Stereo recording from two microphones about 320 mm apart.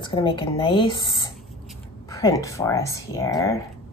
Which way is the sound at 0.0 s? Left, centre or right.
Centre.